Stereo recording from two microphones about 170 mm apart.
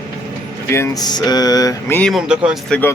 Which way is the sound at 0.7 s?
20° left (ahead or behind).